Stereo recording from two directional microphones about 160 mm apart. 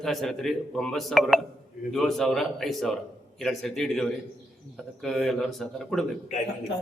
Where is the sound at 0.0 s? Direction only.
Centre (ahead or behind).